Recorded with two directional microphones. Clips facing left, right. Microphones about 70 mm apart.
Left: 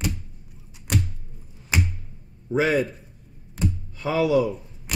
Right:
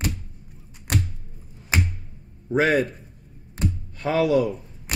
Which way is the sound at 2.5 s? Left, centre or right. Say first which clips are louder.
Right 1 dB; right.